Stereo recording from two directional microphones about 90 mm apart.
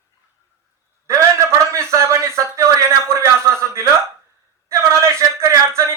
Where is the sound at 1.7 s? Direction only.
30° right (ahead or behind).